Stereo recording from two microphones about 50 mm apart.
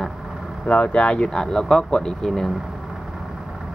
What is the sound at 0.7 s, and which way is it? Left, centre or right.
Speech, left.